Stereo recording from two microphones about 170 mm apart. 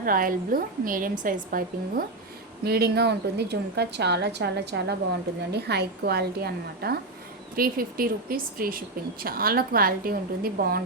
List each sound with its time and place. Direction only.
0.0 s a woman's voice: 55° right (ahead or behind)
2.6 s a woman's voice: 70° right (ahead or behind)